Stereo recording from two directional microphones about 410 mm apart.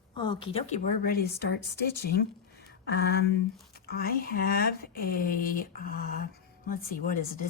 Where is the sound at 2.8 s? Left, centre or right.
Left.